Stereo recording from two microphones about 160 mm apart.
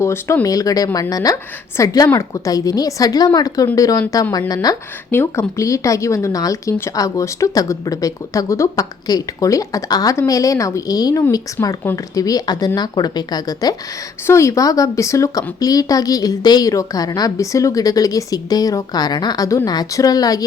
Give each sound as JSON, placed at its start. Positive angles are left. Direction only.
{"t": 0.0, "sound": "speech", "side_deg": 15}